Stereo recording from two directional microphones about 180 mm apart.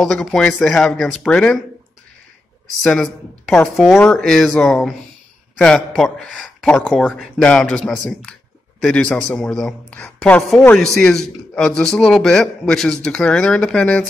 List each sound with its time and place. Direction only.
0.0 s a woman's voice: 5° left (ahead or behind)
2.8 s a woman's voice: 5° left (ahead or behind)